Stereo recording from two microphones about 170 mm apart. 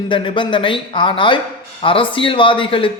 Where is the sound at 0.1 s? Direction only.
30° left (ahead or behind).